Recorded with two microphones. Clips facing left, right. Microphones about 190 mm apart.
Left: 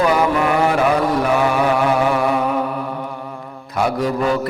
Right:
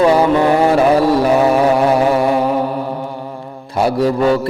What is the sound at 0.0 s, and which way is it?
Mantra, 30° right (ahead or behind).